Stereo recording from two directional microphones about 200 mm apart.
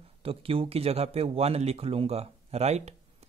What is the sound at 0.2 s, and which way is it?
Speech, 30° right (ahead or behind).